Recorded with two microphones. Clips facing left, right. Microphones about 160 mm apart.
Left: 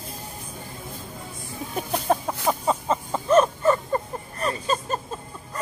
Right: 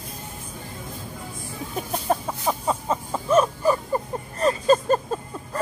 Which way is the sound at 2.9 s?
5° right (ahead or behind).